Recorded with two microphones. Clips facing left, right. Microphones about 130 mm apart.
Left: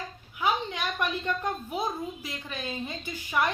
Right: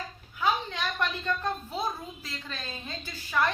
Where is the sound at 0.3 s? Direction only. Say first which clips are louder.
Even; 15° left (ahead or behind).